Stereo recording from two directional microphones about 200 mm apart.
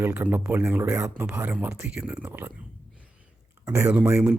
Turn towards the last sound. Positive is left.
turn(degrees=-10)  # may be behind; listen again after turning